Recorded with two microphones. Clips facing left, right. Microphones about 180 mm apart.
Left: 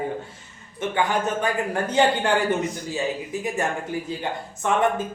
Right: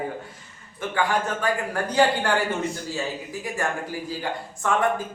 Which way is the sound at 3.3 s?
20° left (ahead or behind).